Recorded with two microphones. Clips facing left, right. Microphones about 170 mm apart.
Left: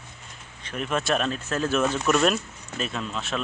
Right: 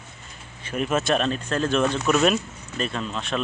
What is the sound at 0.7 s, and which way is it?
Speech, 5° right (ahead or behind).